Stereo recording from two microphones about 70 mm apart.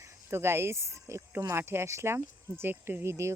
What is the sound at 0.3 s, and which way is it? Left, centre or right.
Speech, right.